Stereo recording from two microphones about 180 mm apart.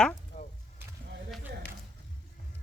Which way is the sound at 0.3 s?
40° left (ahead or behind).